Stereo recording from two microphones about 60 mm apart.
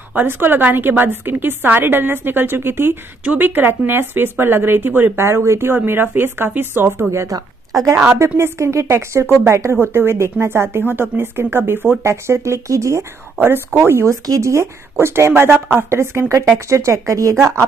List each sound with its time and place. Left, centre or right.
0.1 s a woman's voice: right
7.1 s speech: right
8.2 s a woman's voice: right
12.0 s speech: right
13.7 s speech: right
14.2 s speech: right